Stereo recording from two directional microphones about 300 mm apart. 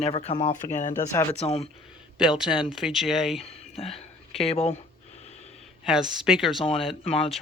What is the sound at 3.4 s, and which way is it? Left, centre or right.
Speech, centre.